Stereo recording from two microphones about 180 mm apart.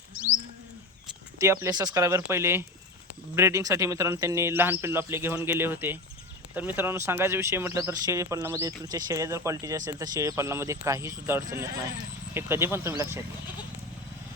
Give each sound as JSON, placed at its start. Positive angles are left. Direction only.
{"t": 1.4, "sound": "speech", "side_deg": -15}